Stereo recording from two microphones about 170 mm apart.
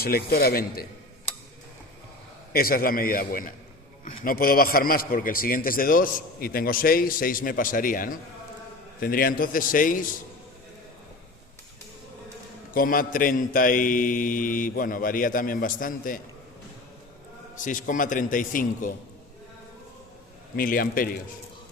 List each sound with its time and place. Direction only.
0.0 s a man's voice: 65° left (ahead or behind)
2.5 s a man's voice: 60° left (ahead or behind)
9.0 s mantra: 60° left (ahead or behind)
12.7 s mantra: 55° left (ahead or behind)
17.6 s mantra: 50° left (ahead or behind)
20.6 s a man's voice: 55° left (ahead or behind)